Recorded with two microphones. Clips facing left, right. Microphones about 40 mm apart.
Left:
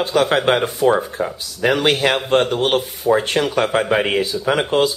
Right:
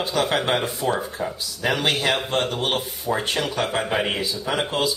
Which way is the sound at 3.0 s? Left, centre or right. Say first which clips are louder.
Left 7 dB; left.